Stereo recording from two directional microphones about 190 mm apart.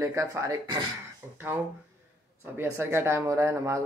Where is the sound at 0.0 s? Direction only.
15° right (ahead or behind).